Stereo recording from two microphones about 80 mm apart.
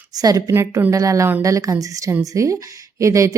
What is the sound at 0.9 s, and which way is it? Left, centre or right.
A woman's voice, right.